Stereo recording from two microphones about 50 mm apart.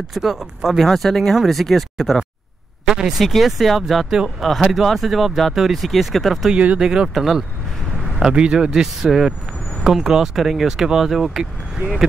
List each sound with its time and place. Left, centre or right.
0.1 s speech: centre
2.9 s speech: centre
6.5 s speech: right
6.8 s speech: centre
8.2 s speech: centre